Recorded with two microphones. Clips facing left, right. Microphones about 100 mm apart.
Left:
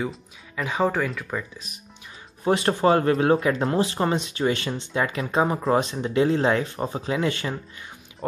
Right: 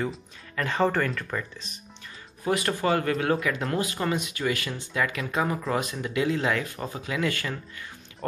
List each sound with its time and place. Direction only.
0.0 s speech: 5° left (ahead or behind)
2.4 s speech: 30° left (ahead or behind)